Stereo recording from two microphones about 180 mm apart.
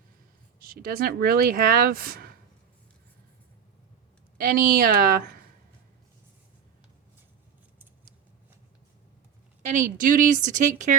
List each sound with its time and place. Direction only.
0.6 s speech: 55° right (ahead or behind)
4.4 s a woman's voice: 50° right (ahead or behind)
9.6 s a woman's voice: 45° right (ahead or behind)